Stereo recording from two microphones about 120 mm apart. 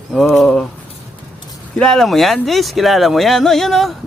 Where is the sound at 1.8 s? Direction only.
5° left (ahead or behind).